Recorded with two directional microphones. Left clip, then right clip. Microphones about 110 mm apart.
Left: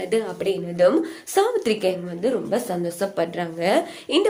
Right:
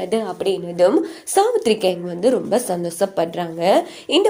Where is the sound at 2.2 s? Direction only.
85° right.